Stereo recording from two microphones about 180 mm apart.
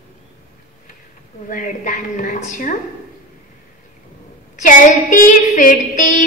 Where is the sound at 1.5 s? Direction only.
50° left (ahead or behind).